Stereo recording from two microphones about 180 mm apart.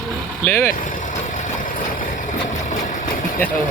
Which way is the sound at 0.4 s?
10° left (ahead or behind).